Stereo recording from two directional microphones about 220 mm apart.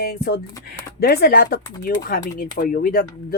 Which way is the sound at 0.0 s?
45° left (ahead or behind).